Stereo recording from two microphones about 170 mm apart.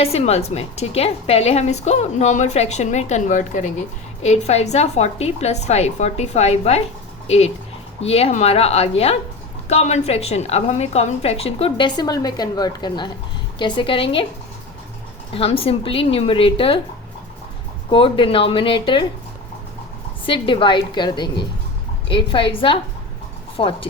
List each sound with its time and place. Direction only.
0.0 s a woman's voice: 35° left (ahead or behind)
15.3 s a woman's voice: 35° left (ahead or behind)
17.9 s a woman's voice: 30° left (ahead or behind)
20.2 s a woman's voice: 30° left (ahead or behind)